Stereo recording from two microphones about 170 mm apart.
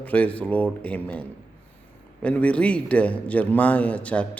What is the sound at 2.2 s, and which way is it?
A man's voice, 10° left (ahead or behind).